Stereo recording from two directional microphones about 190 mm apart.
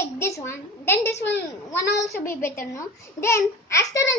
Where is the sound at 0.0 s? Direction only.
15° left (ahead or behind).